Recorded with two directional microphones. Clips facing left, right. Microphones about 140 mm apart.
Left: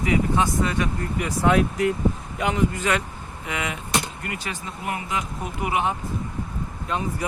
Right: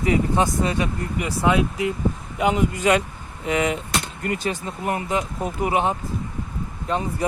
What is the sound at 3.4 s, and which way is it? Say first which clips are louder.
Speech: right 8 dB; 35° right (ahead or behind).